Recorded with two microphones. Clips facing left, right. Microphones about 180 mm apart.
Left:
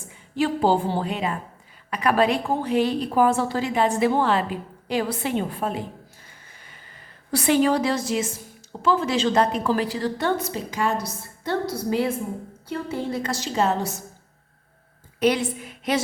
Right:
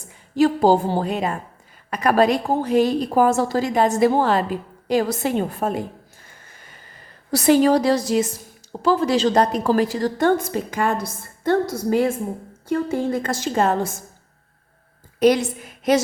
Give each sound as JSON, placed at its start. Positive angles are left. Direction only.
{"t": 0.0, "sound": "a woman's voice", "side_deg": -40}
{"t": 6.2, "sound": "a sound", "side_deg": -45}
{"t": 7.3, "sound": "a woman's voice", "side_deg": -40}
{"t": 15.2, "sound": "a woman's voice", "side_deg": -40}